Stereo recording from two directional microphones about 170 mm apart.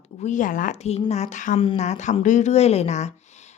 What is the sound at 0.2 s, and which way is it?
A woman's voice, 45° left (ahead or behind).